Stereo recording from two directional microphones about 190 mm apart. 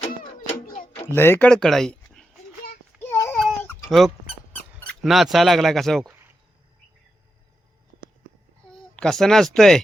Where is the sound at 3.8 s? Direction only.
Centre (ahead or behind).